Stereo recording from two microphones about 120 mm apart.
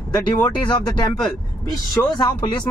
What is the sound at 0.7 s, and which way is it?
Speech, 40° left (ahead or behind).